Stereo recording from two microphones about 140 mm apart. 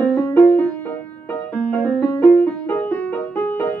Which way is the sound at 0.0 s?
15° left (ahead or behind).